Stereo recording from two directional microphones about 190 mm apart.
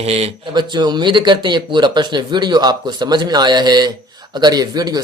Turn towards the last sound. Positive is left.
turn(degrees=-20)  # may be behind; listen again after turning